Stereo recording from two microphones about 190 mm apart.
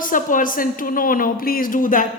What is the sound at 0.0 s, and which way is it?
A woman's voice, 45° left (ahead or behind).